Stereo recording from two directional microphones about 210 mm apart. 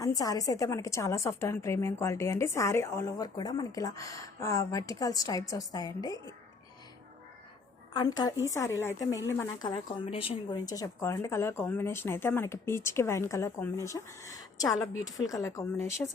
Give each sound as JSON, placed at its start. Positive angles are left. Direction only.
{"t": 0.0, "sound": "a woman's voice", "side_deg": 15}
{"t": 7.9, "sound": "a woman's voice", "side_deg": 20}